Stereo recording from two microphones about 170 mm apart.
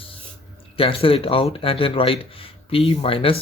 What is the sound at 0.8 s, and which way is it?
Speech, 30° left (ahead or behind).